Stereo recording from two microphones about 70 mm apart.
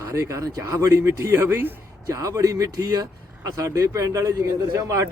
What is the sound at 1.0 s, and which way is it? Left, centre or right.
Speech, right.